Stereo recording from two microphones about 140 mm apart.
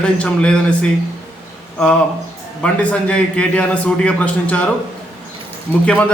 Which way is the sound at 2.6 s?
10° left (ahead or behind).